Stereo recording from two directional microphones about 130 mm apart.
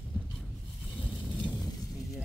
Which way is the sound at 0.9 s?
Centre (ahead or behind).